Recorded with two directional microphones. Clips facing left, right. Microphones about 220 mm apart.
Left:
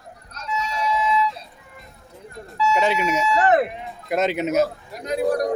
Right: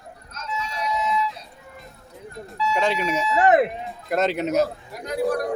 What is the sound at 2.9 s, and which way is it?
Speech, 35° right (ahead or behind).